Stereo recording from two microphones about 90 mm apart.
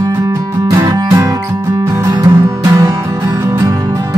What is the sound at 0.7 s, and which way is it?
Music, 45° right (ahead or behind).